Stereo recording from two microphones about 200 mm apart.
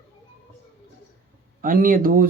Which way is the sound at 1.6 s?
45° right (ahead or behind).